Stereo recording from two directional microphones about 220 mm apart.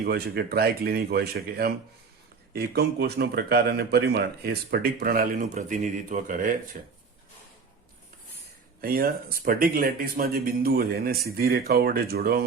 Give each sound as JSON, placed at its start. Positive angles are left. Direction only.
{"t": 0.0, "sound": "a man's voice", "side_deg": -45}
{"t": 8.8, "sound": "a man's voice", "side_deg": -45}